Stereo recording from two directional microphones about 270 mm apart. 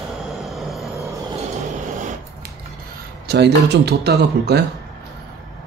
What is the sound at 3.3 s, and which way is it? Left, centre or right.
A man's voice, right.